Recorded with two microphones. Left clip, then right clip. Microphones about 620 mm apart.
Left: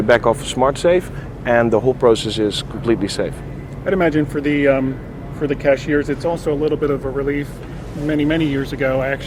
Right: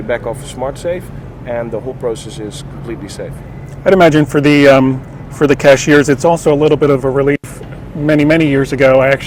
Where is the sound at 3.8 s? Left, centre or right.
Right.